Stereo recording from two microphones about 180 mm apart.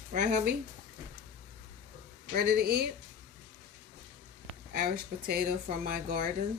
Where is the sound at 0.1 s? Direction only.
45° right (ahead or behind).